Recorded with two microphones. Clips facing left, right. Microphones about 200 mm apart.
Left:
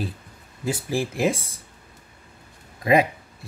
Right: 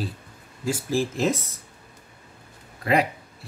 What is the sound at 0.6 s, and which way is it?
Speech, 15° left (ahead or behind).